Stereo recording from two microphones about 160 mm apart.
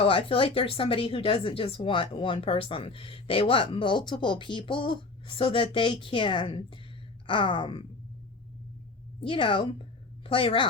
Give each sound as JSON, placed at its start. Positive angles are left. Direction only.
{"t": 0.0, "sound": "a woman's voice", "side_deg": 35}
{"t": 9.2, "sound": "a woman's voice", "side_deg": 35}